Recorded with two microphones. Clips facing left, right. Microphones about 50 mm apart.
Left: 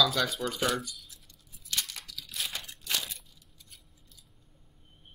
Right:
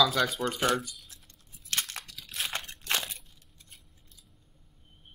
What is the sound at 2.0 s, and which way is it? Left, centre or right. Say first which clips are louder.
Crunch: right 3 dB; right.